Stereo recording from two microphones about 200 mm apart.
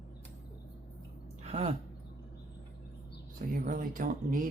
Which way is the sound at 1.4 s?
30° right (ahead or behind).